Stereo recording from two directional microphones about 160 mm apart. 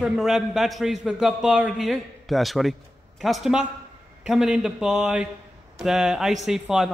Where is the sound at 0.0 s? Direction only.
5° right (ahead or behind).